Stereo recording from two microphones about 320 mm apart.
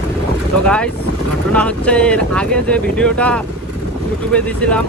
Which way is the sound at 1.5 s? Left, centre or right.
Centre.